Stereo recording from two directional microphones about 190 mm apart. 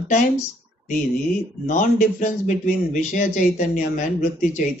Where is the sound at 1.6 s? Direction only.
40° left (ahead or behind).